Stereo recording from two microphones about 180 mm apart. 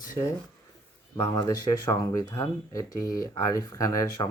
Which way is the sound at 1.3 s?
20° left (ahead or behind).